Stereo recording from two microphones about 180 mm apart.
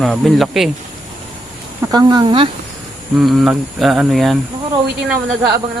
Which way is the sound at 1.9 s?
20° right (ahead or behind).